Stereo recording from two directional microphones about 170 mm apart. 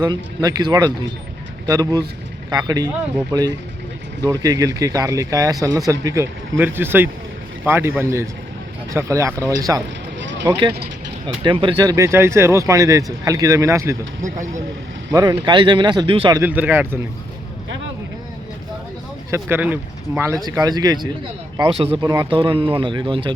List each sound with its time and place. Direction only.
0.0 s speech: 25° right (ahead or behind)
10.2 s vehicle: 90° right
11.4 s speech: 30° right (ahead or behind)
14.3 s speech: 45° right (ahead or behind)
15.1 s speech: 20° right (ahead or behind)
16.4 s speech: 10° right (ahead or behind)
19.3 s speech: 10° right (ahead or behind)
22.3 s speech: 30° right (ahead or behind)